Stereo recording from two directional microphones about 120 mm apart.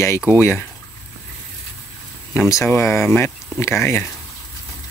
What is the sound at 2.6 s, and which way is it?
Speech, 20° left (ahead or behind).